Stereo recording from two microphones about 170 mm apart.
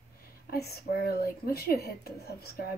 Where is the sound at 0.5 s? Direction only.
65° left (ahead or behind).